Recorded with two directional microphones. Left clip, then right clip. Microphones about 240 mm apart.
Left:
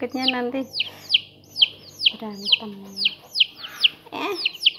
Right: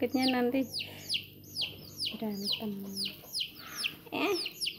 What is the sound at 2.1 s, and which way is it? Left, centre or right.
Speech, centre.